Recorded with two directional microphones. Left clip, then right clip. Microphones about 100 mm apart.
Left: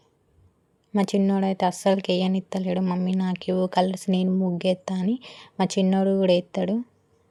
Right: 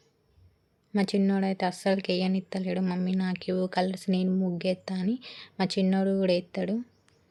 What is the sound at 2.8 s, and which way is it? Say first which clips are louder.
Speech: left 4 dB; 25° left (ahead or behind).